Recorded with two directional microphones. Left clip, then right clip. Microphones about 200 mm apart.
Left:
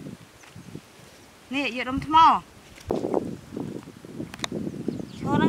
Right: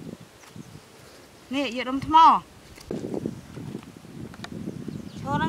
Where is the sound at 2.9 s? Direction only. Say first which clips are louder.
Left 6 dB; 55° left (ahead or behind).